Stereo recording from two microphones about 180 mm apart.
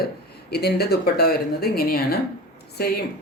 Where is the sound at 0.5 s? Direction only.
60° left (ahead or behind).